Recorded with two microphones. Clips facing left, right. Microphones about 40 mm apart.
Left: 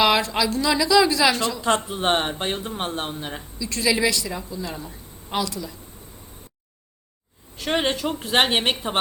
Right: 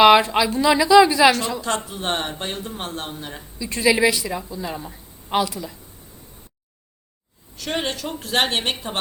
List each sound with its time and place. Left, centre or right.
0.0 s a woman's voice: right
1.9 s speech: left
3.6 s a woman's voice: right
7.5 s speech: left